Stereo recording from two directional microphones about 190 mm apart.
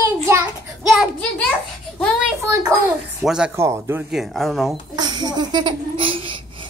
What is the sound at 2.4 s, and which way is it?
A child's voice, 15° right (ahead or behind).